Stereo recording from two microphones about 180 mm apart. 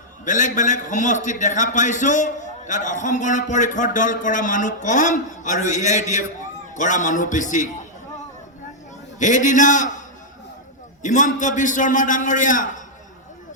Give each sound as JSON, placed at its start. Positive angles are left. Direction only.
{"t": 0.3, "sound": "a man's voice", "side_deg": 45}
{"t": 9.1, "sound": "a man's voice", "side_deg": 45}
{"t": 11.0, "sound": "a man's voice", "side_deg": 45}